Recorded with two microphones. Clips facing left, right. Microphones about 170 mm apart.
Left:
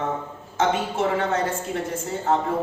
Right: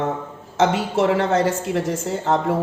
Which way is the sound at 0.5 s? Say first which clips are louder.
Right 4 dB; 85° right.